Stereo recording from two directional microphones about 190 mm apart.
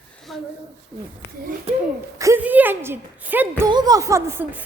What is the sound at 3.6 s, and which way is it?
Speech, 20° right (ahead or behind).